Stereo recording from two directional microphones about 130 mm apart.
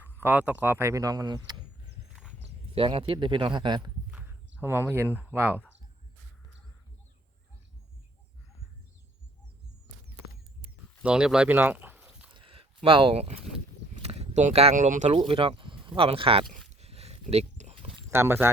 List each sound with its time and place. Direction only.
0.0 s speech: 15° right (ahead or behind); by 1.6 s 30° right (ahead or behind)
2.7 s speech: 45° right (ahead or behind)
4.1 s speech: 10° right (ahead or behind)
11.0 s speech: 5° right (ahead or behind)
12.3 s a sound: 45° right (ahead or behind); by 14.7 s 60° right (ahead or behind)
14.8 s speech: 75° right (ahead or behind)
15.1 s speech: 40° right (ahead or behind)
16.5 s a sound: 55° right (ahead or behind)
18.1 s speech: 20° right (ahead or behind)